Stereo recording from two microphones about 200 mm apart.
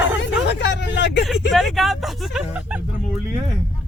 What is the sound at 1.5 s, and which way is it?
Speech, centre (ahead or behind).